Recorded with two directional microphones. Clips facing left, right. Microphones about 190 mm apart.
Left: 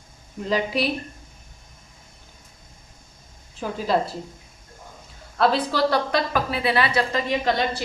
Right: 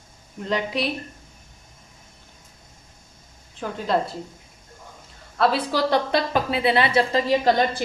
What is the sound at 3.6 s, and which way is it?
Speech, 5° left (ahead or behind).